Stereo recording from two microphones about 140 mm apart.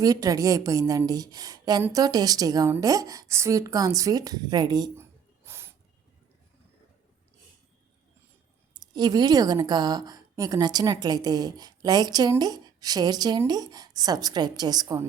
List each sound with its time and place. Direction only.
0.0 s a woman's voice: 25° right (ahead or behind)
5.5 s a sound: 15° right (ahead or behind)
8.7 s a woman's voice: 30° right (ahead or behind)